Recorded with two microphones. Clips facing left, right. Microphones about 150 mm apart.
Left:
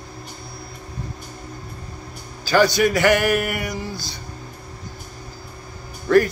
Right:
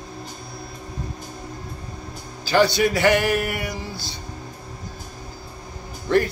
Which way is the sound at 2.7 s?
25° right (ahead or behind).